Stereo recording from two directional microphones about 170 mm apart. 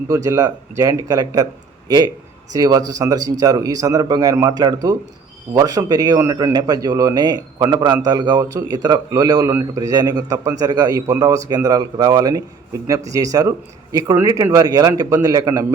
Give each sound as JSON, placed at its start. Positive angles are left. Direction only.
{"t": 0.1, "sound": "a man's voice", "side_deg": -20}
{"t": 2.5, "sound": "a man's voice", "side_deg": -20}